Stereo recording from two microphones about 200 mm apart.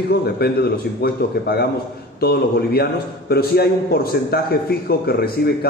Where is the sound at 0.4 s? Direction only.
50° left (ahead or behind).